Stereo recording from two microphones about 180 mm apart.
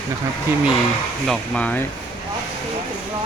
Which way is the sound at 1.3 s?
5° left (ahead or behind).